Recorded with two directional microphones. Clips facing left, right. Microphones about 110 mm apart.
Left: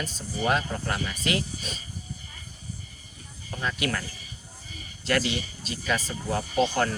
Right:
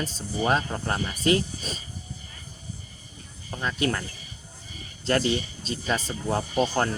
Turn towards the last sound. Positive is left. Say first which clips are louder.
# even
turn(degrees=-30)  # may be behind; listen again after turning